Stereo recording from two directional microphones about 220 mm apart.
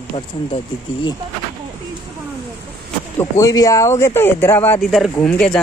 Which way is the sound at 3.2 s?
15° left (ahead or behind).